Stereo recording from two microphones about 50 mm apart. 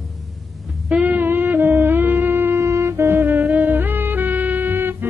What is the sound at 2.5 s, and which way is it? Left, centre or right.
Music, right.